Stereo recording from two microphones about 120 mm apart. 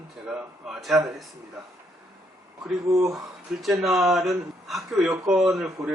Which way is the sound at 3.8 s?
5° right (ahead or behind).